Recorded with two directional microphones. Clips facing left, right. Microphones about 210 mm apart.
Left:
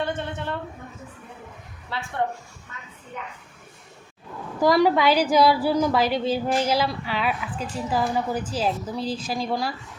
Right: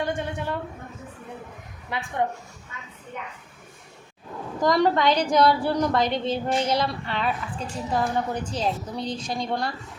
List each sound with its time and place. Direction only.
0.0 s a woman's voice: 10° right (ahead or behind)
1.9 s a woman's voice: 15° right (ahead or behind)
4.6 s a woman's voice: 5° left (ahead or behind)